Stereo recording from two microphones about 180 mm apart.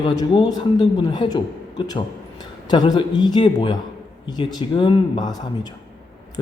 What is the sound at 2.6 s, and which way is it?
Speech, 25° left (ahead or behind).